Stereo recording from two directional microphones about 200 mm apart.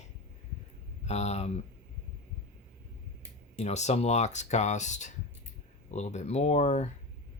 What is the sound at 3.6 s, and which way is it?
Speech, 35° left (ahead or behind).